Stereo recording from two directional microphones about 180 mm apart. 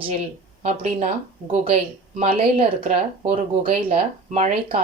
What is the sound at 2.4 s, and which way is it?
Speech, 30° right (ahead or behind).